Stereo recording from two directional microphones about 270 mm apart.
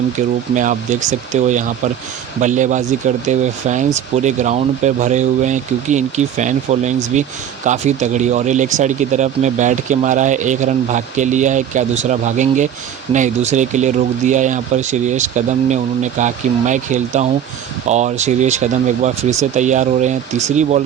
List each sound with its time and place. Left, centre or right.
0.2 s speech: right